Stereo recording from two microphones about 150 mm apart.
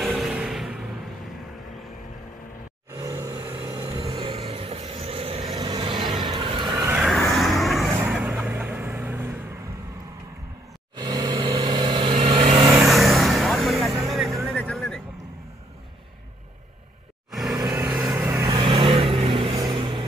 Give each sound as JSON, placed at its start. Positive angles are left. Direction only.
{"t": 0.0, "sound": "music", "side_deg": 0}
{"t": 2.9, "sound": "vehicle", "side_deg": -20}
{"t": 4.0, "sound": "vehicle", "side_deg": -35}
{"t": 6.9, "sound": "vehicle", "side_deg": -5}
{"t": 11.0, "sound": "vehicle", "side_deg": -30}
{"t": 12.8, "sound": "vehicle", "side_deg": 0}
{"t": 17.3, "sound": "vehicle", "side_deg": 0}
{"t": 17.6, "sound": "vehicle", "side_deg": -20}
{"t": 18.5, "sound": "vehicle", "side_deg": -30}
{"t": 19.5, "sound": "vehicle", "side_deg": -30}